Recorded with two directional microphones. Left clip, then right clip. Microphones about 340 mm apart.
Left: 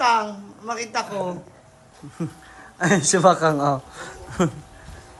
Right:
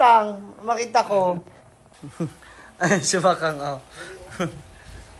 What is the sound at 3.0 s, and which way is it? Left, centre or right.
Speech, centre.